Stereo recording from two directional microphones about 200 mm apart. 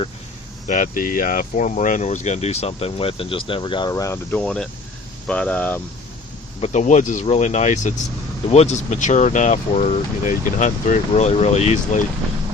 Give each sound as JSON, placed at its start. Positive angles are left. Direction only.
{"t": 0.7, "sound": "speech", "side_deg": 40}
{"t": 6.6, "sound": "speech", "side_deg": 35}